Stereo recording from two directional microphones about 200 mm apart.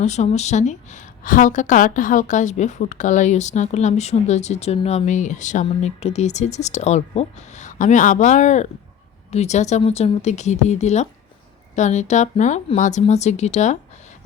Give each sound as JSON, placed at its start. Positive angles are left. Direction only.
{"t": 0.0, "sound": "a woman's voice", "side_deg": 35}